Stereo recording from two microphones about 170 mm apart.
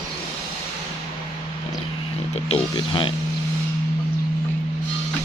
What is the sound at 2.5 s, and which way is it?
Speech, 30° left (ahead or behind).